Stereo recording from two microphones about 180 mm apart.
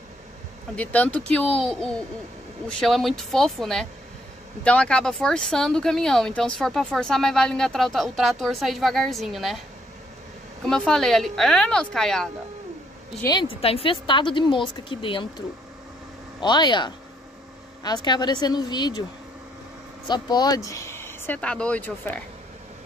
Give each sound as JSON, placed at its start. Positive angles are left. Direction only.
{"t": 0.7, "sound": "speech", "side_deg": 10}
{"t": 10.7, "sound": "speech", "side_deg": 5}
{"t": 13.2, "sound": "a woman's voice", "side_deg": 25}
{"t": 20.1, "sound": "speech", "side_deg": 25}